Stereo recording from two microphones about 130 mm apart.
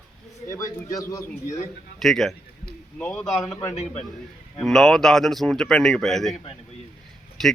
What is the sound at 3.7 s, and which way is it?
Speech, 55° left (ahead or behind).